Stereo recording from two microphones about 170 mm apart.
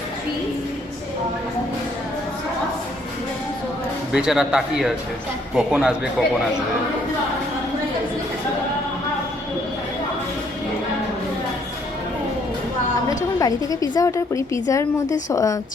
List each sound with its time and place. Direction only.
4.1 s speech: 5° right (ahead or behind)
13.4 s a woman's voice: 20° left (ahead or behind)